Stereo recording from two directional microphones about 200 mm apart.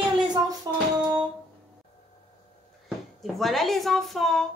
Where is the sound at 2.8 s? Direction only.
Centre (ahead or behind).